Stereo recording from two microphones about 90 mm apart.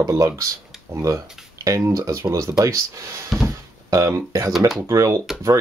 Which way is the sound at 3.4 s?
35° right (ahead or behind).